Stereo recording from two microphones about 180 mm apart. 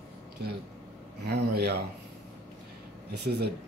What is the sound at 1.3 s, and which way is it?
Speech, 65° right (ahead or behind).